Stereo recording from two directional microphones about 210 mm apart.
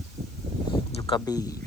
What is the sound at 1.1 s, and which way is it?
Speech, 20° left (ahead or behind).